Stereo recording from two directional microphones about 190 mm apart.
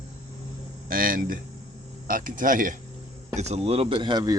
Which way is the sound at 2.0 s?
45° right (ahead or behind).